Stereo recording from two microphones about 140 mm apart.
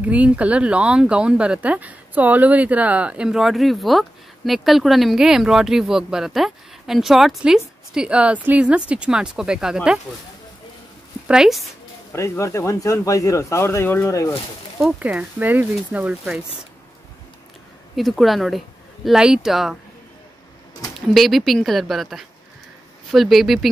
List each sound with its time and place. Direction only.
0.0 s speech: 10° right (ahead or behind)
11.2 s speech: 5° right (ahead or behind)
12.1 s speech: 20° left (ahead or behind)
14.8 s speech: 10° right (ahead or behind)
17.9 s speech: centre (ahead or behind)
21.1 s speech: centre (ahead or behind)